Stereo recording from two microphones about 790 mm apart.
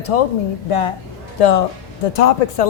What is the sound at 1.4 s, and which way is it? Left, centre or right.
Speech, left.